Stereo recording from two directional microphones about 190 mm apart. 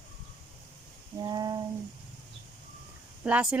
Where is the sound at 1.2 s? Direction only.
20° right (ahead or behind).